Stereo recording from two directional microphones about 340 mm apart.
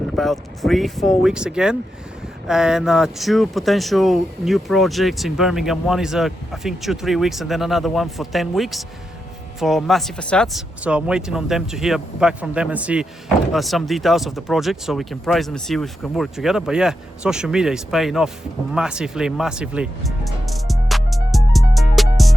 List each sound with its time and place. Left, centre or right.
0.2 s speech: centre
18.7 s music: centre